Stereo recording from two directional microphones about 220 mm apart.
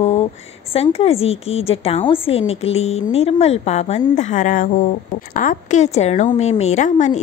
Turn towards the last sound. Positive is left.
turn(degrees=35)  # may be behind; listen again after turning